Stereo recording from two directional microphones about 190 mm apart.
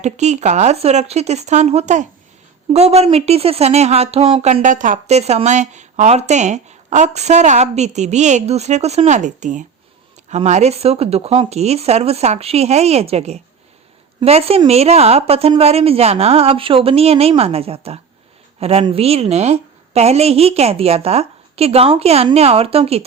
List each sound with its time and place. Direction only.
0.0 s speech: 35° right (ahead or behind)